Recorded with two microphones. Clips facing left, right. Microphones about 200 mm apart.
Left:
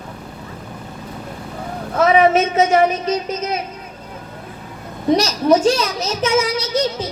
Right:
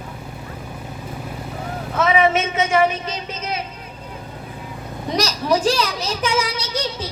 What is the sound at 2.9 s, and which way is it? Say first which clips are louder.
Speech: left 8 dB; 30° right (ahead or behind).